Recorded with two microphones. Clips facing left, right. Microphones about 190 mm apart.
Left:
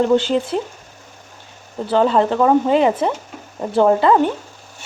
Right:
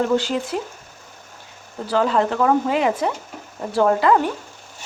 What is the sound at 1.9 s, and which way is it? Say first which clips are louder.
Speech: left 4 dB; 30° left (ahead or behind).